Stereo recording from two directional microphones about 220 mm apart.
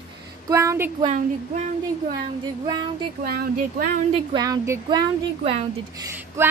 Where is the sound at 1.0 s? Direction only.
30° right (ahead or behind).